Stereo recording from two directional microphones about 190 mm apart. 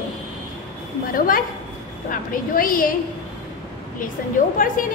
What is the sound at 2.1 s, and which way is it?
Speech, 50° left (ahead or behind).